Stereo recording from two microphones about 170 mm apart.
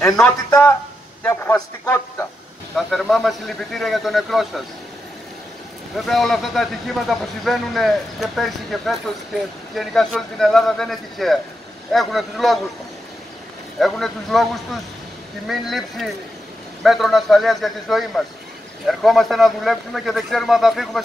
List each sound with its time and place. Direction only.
0.0 s a man's voice: 5° left (ahead or behind)
2.7 s a man's voice: centre (ahead or behind)
5.9 s a man's voice: centre (ahead or behind)
13.7 s a man's voice: centre (ahead or behind)